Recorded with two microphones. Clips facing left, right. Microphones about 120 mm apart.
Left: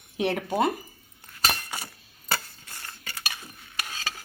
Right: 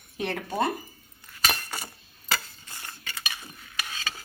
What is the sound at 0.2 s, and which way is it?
Speech, 15° left (ahead or behind).